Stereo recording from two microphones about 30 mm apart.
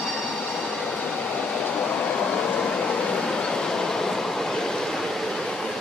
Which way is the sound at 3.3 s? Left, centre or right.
Left.